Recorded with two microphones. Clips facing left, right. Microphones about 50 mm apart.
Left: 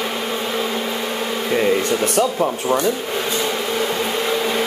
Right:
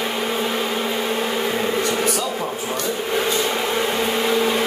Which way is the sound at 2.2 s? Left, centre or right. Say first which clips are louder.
Left 7 dB; left.